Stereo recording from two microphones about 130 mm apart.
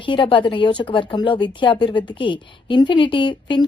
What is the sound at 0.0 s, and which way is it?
A woman's voice, 40° left (ahead or behind).